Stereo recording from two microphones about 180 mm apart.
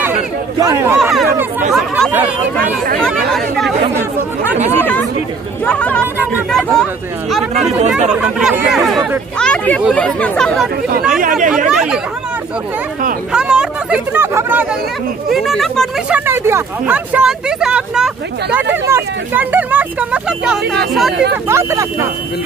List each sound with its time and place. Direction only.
0.6 s speech: 15° right (ahead or behind)
0.9 s speech: centre (ahead or behind)
5.7 s speech: 5° left (ahead or behind)
7.5 s speech: 35° right (ahead or behind)
8.1 s speech: 5° right (ahead or behind)
10.9 s speech: 55° right (ahead or behind)
11.5 s speech: 5° right (ahead or behind)
13.3 s speech: 5° right (ahead or behind)
15.3 s speech: centre (ahead or behind)
16.3 s speech: 15° right (ahead or behind)
21.5 s speech: 15° right (ahead or behind)